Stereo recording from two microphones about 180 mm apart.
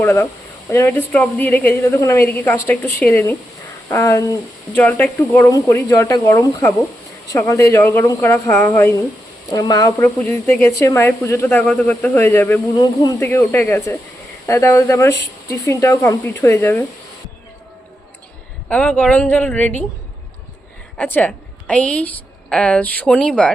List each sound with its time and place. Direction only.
0.0 s speech: 15° left (ahead or behind)
10.2 s speech: 10° left (ahead or behind)
15.1 s speech: 70° left (ahead or behind)
15.6 s speech: 15° left (ahead or behind)
18.7 s speech: 5° left (ahead or behind)
21.0 s a woman's voice: 10° left (ahead or behind)